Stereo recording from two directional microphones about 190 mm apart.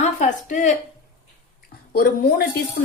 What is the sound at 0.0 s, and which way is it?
Speech, 40° left (ahead or behind).